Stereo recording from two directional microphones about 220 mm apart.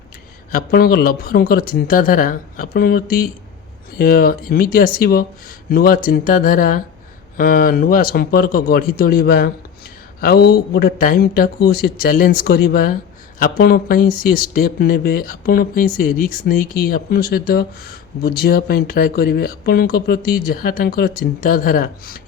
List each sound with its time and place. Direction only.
0.5 s speech: 45° left (ahead or behind)